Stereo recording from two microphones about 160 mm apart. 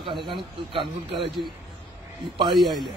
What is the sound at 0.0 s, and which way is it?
A man's voice, 30° right (ahead or behind).